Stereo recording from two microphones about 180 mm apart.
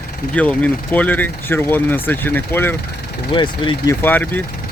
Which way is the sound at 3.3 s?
25° left (ahead or behind).